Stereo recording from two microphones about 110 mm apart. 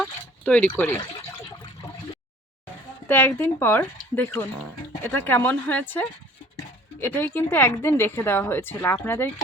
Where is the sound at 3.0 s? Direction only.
20° left (ahead or behind).